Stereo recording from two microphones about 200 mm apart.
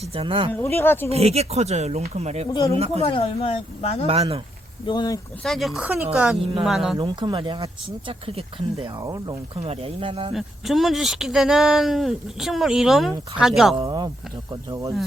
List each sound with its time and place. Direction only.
0.1 s speech: 25° right (ahead or behind)
0.5 s speech: 10° left (ahead or behind)
1.1 s speech: 30° right (ahead or behind)
2.5 s speech: 20° left (ahead or behind)
2.7 s speech: 30° right (ahead or behind)
3.0 s speech: 25° left (ahead or behind)
4.0 s speech: 30° right (ahead or behind)
4.9 s speech: 20° left (ahead or behind)
5.4 s speech: centre (ahead or behind)
6.3 s speech: 25° right (ahead or behind)
6.7 s speech: centre (ahead or behind)
7.0 s speech: 25° right (ahead or behind)
10.3 s speech: centre (ahead or behind)
13.7 s speech: 20° right (ahead or behind)